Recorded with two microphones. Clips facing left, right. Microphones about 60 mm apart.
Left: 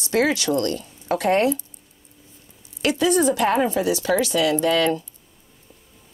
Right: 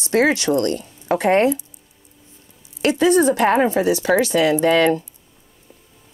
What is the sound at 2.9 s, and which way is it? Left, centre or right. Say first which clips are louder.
Speech: right 4 dB; right.